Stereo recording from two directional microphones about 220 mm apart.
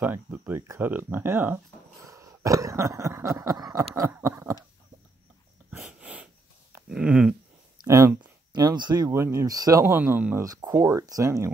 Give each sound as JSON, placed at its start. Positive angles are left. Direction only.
{"t": 0.0, "sound": "speech", "side_deg": -10}
{"t": 5.7, "sound": "dog", "side_deg": -5}
{"t": 6.7, "sound": "a sound", "side_deg": -5}
{"t": 7.8, "sound": "speech", "side_deg": -15}